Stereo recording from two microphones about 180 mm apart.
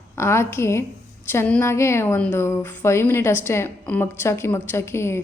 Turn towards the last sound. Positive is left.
turn(degrees=15)  # may be behind; listen again after turning